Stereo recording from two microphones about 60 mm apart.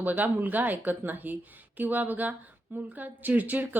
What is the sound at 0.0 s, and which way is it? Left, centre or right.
A woman's voice, right.